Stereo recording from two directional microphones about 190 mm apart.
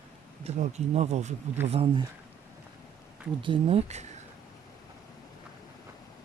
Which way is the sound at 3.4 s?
30° right (ahead or behind).